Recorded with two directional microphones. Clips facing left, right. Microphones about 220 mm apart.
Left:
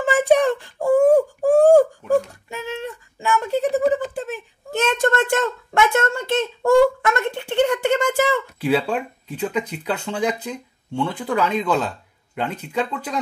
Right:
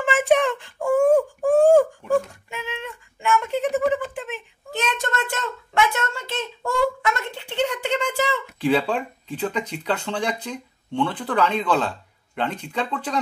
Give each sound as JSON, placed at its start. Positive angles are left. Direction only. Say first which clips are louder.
{"t": 0.0, "sound": "wail", "louder": "left 3 dB", "side_deg": 40}
{"t": 8.5, "sound": "speech", "louder": "right 3 dB", "side_deg": 5}